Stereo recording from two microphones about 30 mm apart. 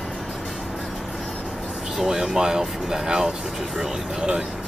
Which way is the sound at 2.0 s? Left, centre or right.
Centre.